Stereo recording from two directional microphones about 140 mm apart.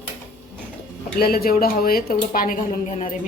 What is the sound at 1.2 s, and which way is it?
Speech, 90° left.